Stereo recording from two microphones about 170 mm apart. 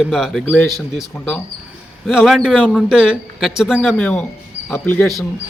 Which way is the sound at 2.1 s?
Centre (ahead or behind).